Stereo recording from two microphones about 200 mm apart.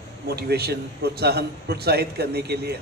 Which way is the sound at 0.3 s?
55° right (ahead or behind).